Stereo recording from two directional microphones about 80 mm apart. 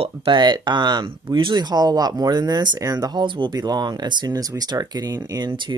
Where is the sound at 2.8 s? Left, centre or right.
Right.